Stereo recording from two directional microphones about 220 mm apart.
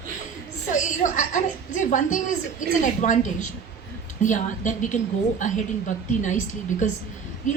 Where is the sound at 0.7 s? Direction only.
35° left (ahead or behind).